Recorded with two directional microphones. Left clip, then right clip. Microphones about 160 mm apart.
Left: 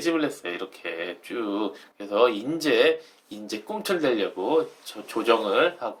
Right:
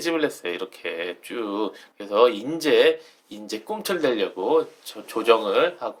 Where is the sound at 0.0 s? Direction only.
30° right (ahead or behind).